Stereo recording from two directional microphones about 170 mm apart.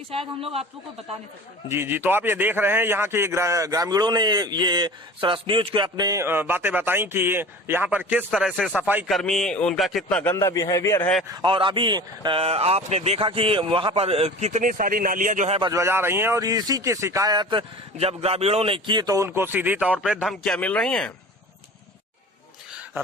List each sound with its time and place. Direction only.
0.1 s speech: 35° right (ahead or behind)
1.6 s a man's voice: 15° right (ahead or behind); by 10.3 s 5° left (ahead or behind)
10.3 s a man's voice: 20° left (ahead or behind)
11.3 s speech: 30° right (ahead or behind)
15.7 s a man's voice: 15° right (ahead or behind); by 21.1 s 5° left (ahead or behind)